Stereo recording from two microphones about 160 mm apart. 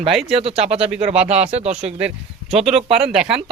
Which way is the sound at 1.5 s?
40° right (ahead or behind).